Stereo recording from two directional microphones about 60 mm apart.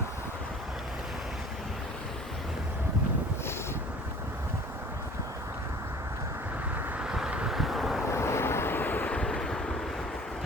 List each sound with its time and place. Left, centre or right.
7.0 s vehicle: centre
7.5 s vehicle: centre
8.1 s vehicle: left
9.1 s vehicle: centre